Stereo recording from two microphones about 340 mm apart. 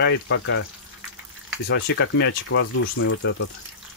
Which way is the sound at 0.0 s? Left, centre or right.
Left.